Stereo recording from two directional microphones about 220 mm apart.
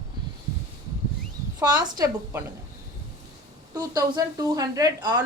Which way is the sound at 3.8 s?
15° right (ahead or behind).